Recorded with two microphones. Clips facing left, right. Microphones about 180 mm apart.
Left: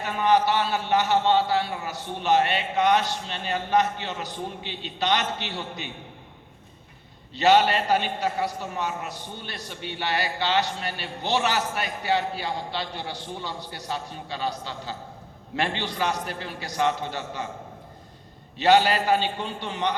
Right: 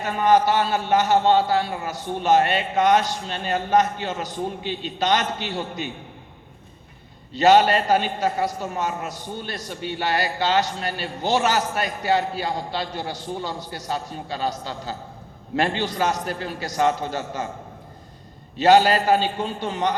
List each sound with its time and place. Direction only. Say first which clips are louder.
0.0 s a man's voice: right 3 dB; 45° right (ahead or behind)
7.3 s a man's voice: right 4 dB; 40° right (ahead or behind)
18.5 s a man's voice: right 4 dB; 40° right (ahead or behind)